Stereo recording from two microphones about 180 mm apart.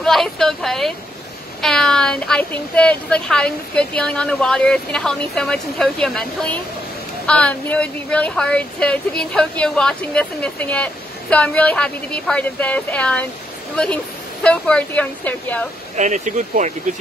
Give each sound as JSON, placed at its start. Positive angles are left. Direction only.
{"t": 0.0, "sound": "speech", "side_deg": 0}
{"t": 14.4, "sound": "a woman's voice", "side_deg": 5}
{"t": 16.0, "sound": "speech", "side_deg": -40}